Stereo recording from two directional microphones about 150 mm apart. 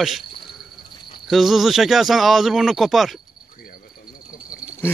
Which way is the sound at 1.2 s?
Centre (ahead or behind).